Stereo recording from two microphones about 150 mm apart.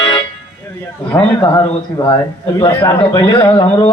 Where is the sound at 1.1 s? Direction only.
25° left (ahead or behind).